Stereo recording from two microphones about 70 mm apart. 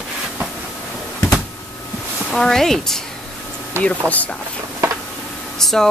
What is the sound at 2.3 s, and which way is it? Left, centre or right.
Speech, centre.